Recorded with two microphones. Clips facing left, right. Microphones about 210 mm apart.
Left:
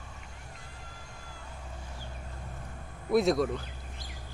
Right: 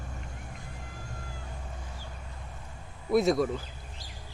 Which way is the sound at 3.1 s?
Centre (ahead or behind).